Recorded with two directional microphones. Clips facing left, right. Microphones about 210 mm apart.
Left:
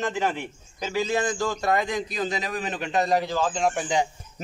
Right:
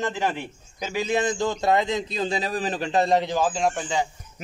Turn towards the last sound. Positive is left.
turn(degrees=15)  # may be behind; listen again after turning